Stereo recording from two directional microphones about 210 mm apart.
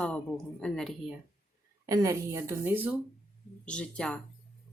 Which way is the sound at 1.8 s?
15° right (ahead or behind).